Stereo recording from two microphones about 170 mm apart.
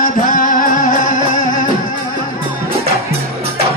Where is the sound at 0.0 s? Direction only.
55° left (ahead or behind).